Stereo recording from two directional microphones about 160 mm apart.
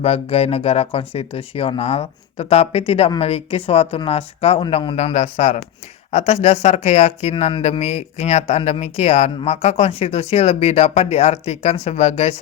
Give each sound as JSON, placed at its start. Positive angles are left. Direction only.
{"t": 0.0, "sound": "speech", "side_deg": 40}